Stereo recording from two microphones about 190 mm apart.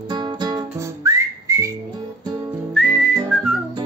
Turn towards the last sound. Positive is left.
turn(degrees=0)  # may be behind; listen again after turning